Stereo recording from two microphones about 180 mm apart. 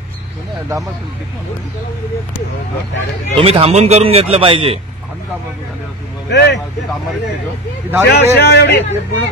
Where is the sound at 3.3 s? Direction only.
30° right (ahead or behind).